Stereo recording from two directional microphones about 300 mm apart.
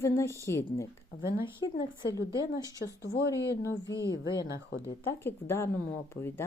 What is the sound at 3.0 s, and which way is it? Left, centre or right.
Speech, left.